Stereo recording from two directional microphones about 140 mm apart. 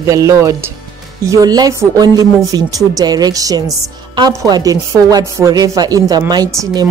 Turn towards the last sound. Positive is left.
turn(degrees=-25)  # may be behind; listen again after turning